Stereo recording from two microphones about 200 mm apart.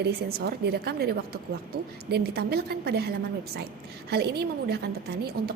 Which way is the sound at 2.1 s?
50° right (ahead or behind).